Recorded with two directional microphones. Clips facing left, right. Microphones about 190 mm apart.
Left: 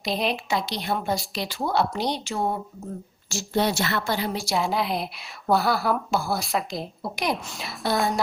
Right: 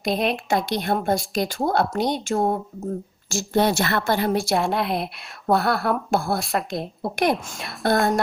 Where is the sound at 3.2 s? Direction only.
50° right (ahead or behind).